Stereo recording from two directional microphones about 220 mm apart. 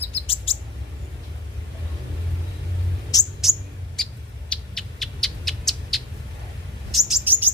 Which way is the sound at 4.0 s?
Centre (ahead or behind).